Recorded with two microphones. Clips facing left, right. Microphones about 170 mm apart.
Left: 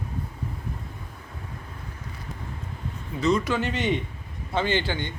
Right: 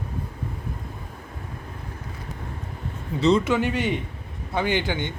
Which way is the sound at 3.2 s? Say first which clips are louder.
Right 4 dB; 30° right (ahead or behind).